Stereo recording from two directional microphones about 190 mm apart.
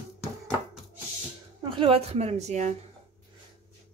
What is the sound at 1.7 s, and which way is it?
A woman's voice, 30° right (ahead or behind).